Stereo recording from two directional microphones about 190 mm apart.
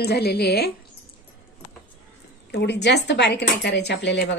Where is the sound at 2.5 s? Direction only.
60° left (ahead or behind).